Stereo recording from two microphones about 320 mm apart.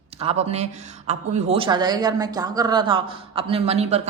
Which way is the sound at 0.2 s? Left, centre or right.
Centre.